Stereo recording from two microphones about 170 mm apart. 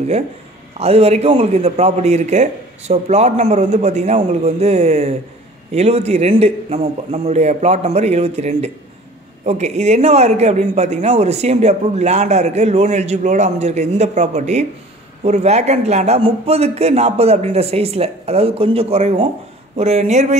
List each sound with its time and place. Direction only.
0.7 s a man's voice: 35° right (ahead or behind)